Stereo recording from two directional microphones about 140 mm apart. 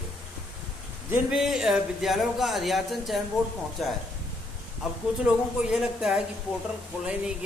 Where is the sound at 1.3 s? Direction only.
5° right (ahead or behind).